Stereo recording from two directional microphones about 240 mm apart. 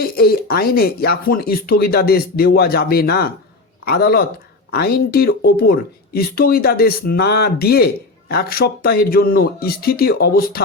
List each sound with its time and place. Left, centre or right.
0.0 s speech: left